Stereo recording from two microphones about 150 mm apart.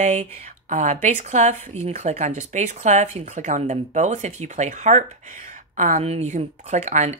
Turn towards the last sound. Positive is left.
turn(degrees=-50)  # may be behind; listen again after turning